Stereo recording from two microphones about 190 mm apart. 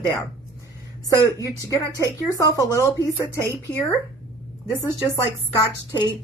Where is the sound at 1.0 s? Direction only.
15° left (ahead or behind).